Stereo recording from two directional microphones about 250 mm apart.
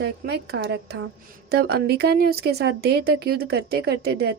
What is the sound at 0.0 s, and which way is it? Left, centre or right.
A woman's voice, right.